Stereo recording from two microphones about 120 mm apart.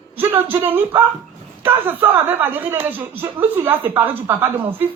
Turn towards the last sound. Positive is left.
turn(degrees=-20)  # may be behind; listen again after turning